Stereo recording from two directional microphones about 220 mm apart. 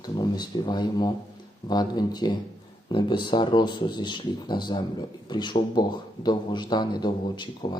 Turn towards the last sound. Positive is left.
turn(degrees=20)  # may be behind; listen again after turning